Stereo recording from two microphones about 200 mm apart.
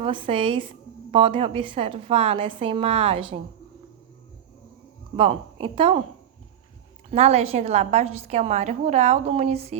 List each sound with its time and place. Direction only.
0.0 s a woman's voice: 25° right (ahead or behind)
5.1 s a woman's voice: 30° right (ahead or behind)
7.1 s a woman's voice: 30° right (ahead or behind)